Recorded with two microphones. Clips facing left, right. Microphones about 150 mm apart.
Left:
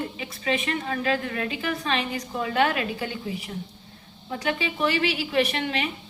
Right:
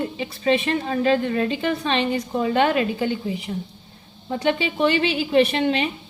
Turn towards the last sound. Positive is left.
turn(degrees=-25)  # may be behind; listen again after turning